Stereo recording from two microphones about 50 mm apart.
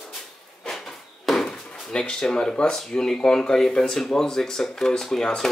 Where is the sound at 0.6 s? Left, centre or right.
Centre.